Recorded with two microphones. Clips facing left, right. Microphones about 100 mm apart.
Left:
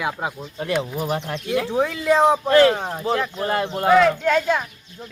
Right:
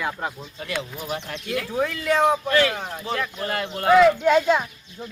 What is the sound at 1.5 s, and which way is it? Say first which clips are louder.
Speech: left 4 dB; 25° left (ahead or behind).